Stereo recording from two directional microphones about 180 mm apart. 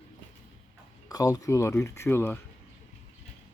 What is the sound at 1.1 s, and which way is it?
Speech, 20° left (ahead or behind).